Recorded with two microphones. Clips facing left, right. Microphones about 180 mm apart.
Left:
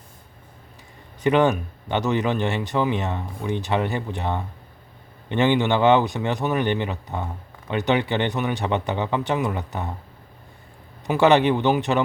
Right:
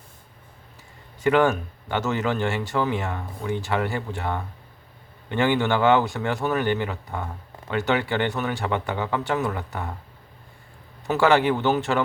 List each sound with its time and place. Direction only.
1.2 s speech: 20° left (ahead or behind)
11.0 s speech: 20° left (ahead or behind)